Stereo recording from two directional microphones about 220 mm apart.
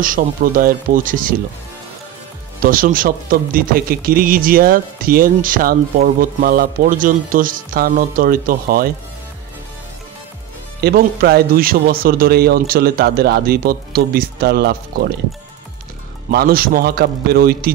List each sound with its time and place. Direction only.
0.0 s speech: 40° right (ahead or behind)
2.6 s speech: 40° right (ahead or behind)
10.8 s speech: 45° right (ahead or behind)
16.3 s speech: 45° right (ahead or behind)